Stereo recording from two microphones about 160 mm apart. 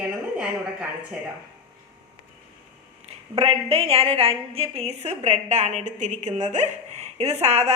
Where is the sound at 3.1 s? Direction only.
40° right (ahead or behind).